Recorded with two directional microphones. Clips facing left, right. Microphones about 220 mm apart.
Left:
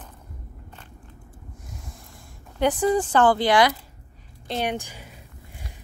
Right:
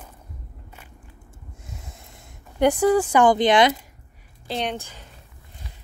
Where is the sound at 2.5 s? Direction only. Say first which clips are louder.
Right 3 dB; 10° right (ahead or behind).